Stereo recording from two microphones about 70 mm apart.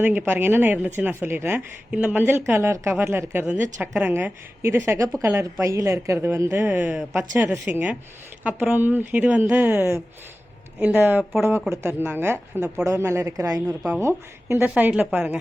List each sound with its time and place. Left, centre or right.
0.0 s a woman's voice: right
1.9 s speech: right
2.3 s a woman's voice: right
3.4 s a woman's voice: centre
4.1 s a woman's voice: right
9.6 s a woman's voice: right
10.8 s a woman's voice: right
12.8 s a woman's voice: right
14.0 s a woman's voice: right
14.8 s speech: right